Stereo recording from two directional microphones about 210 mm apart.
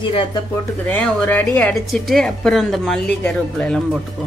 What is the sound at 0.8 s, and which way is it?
A woman's voice, 10° left (ahead or behind).